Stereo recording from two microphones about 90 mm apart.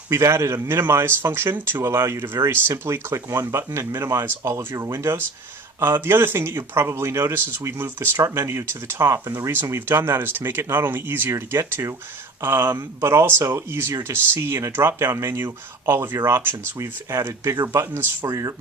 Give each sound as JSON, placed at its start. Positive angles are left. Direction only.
{"t": 0.1, "sound": "speech", "side_deg": -30}